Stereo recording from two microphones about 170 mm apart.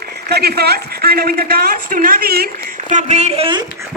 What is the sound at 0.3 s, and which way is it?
Speech, 70° right (ahead or behind).